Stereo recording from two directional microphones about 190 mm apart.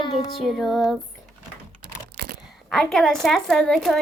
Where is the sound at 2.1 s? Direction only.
50° right (ahead or behind).